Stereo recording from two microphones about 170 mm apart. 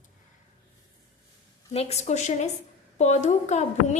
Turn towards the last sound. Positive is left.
turn(degrees=40)  # may be behind; listen again after turning